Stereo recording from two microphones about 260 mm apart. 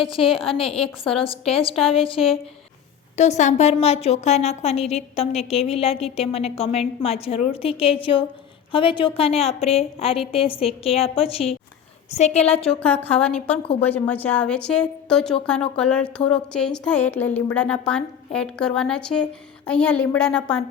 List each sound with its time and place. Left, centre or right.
0.2 s a woman's voice: left
12.8 s a woman's voice: centre
13.6 s a woman's voice: left
13.8 s a woman's voice: centre